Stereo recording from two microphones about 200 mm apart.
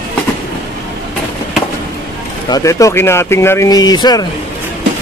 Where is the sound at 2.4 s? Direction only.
15° left (ahead or behind).